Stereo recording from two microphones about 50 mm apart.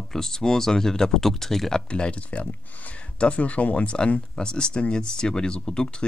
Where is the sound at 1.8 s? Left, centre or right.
Centre.